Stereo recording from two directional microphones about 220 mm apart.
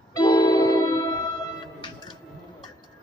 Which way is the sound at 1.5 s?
20° left (ahead or behind).